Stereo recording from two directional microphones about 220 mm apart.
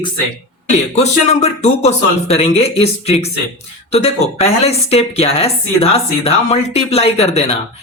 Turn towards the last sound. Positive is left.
turn(degrees=30)  # may be behind; listen again after turning